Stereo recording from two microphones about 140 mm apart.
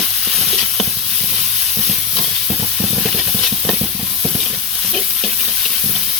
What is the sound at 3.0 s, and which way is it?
Stir, centre (ahead or behind).